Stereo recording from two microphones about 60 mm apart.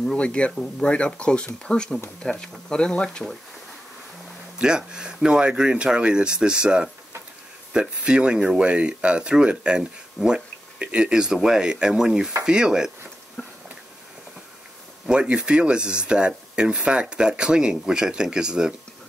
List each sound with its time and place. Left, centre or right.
0.0 s speech: centre
4.6 s speech: centre
13.4 s a sound: left
15.0 s speech: centre